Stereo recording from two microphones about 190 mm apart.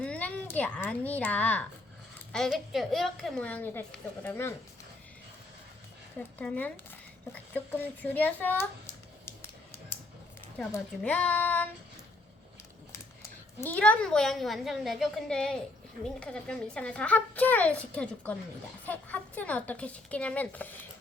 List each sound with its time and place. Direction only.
0.0 s a child's voice: 5° left (ahead or behind)
6.1 s speech: 5° left (ahead or behind)
8.0 s speech: 10° left (ahead or behind)
10.7 s speech: 5° left (ahead or behind)
13.6 s a woman's voice: 10° left (ahead or behind)